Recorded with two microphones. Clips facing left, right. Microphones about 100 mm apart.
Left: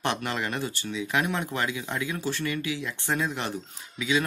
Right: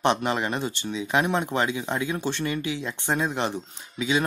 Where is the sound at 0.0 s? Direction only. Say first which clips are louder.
Right 5 dB; 20° right (ahead or behind).